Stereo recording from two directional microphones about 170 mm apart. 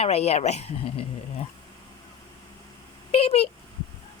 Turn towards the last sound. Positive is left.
turn(degrees=35)  # may be behind; listen again after turning